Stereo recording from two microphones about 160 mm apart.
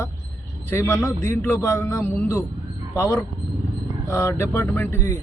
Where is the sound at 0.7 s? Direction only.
15° left (ahead or behind).